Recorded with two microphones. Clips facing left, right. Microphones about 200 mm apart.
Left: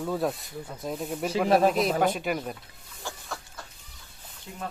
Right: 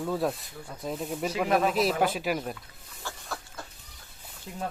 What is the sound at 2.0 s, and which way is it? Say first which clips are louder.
Speech: left 1 dB; 5° right (ahead or behind).